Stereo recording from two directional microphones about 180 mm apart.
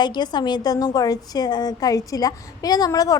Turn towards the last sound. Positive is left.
turn(degrees=20)  # may be behind; listen again after turning